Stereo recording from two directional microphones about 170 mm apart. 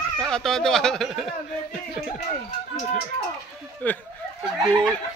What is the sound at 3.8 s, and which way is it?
Speech, 10° left (ahead or behind).